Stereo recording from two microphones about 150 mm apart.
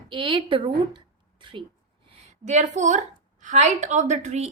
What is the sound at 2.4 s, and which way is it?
A woman's voice, 50° right (ahead or behind).